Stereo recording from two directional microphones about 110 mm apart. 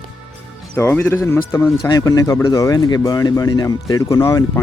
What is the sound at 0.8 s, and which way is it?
Speech, 20° left (ahead or behind).